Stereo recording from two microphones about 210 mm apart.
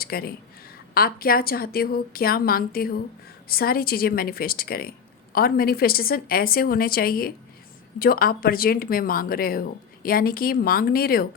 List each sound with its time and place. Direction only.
0.0 s speech: 45° left (ahead or behind)